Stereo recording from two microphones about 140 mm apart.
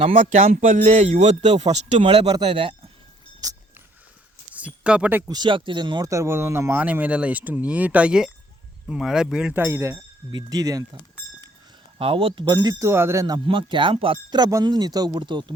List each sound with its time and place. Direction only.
0.0 s music: 40° right (ahead or behind)
0.3 s a man's voice: 75° right (ahead or behind); by 2.3 s 45° right (ahead or behind)
2.3 s speech: 35° right (ahead or behind)
3.4 s a sound: 25° right (ahead or behind)
4.5 s a sound: 10° right (ahead or behind)
5.3 s speech: 35° right (ahead or behind)
11.9 s speech: 40° right (ahead or behind)